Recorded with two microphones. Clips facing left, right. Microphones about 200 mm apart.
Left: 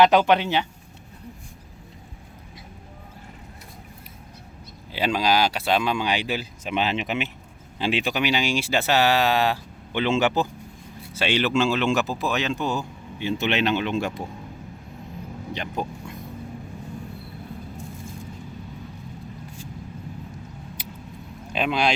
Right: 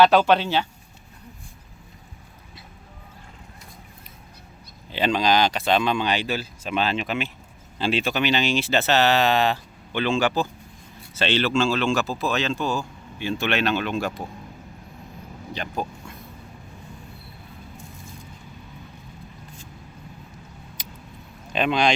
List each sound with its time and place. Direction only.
0.0 s speech: 15° left (ahead or behind)
4.9 s speech: 10° left (ahead or behind)
20.8 s keys jangling: 10° left (ahead or behind)
21.5 s speech: 5° left (ahead or behind)